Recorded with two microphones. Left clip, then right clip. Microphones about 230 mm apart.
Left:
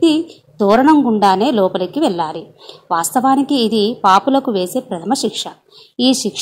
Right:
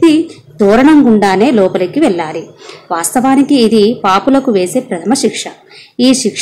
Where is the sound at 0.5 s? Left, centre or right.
Centre.